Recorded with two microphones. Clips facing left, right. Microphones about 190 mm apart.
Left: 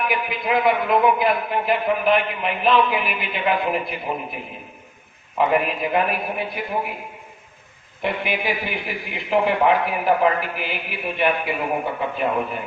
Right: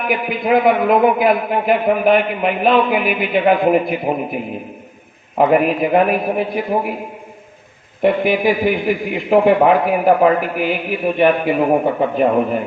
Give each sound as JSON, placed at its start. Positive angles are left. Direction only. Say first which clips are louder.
{"t": 0.1, "sound": "a man's voice", "louder": "right 7 dB", "side_deg": -50}
{"t": 5.4, "sound": "a man's voice", "louder": "right 7 dB", "side_deg": -50}
{"t": 8.0, "sound": "a man's voice", "louder": "right 10 dB", "side_deg": -45}